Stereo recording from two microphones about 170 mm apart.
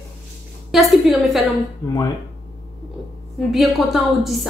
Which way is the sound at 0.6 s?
Centre (ahead or behind).